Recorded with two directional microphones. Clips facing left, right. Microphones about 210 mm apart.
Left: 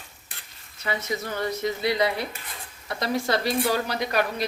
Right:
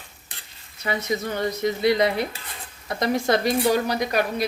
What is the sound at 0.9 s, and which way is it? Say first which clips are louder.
Speech: right 4 dB; 20° right (ahead or behind).